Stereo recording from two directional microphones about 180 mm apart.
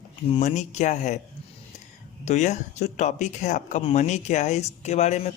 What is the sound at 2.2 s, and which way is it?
Speech, 40° left (ahead or behind).